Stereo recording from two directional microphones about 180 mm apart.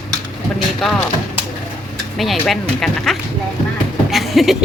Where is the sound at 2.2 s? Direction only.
Centre (ahead or behind).